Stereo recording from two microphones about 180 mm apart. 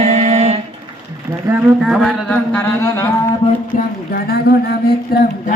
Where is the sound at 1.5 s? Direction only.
5° right (ahead or behind).